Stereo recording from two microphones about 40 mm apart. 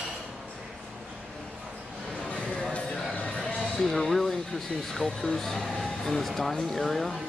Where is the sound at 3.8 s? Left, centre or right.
Centre.